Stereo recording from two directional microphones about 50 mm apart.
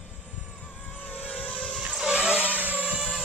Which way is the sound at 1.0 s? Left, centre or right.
Left.